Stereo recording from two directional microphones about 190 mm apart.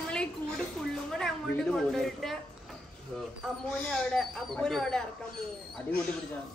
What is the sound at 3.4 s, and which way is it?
Speech, 5° left (ahead or behind).